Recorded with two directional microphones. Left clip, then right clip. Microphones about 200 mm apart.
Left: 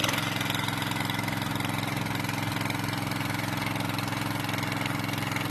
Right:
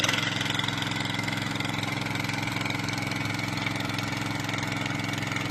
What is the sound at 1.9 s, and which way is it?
Engine, 20° left (ahead or behind).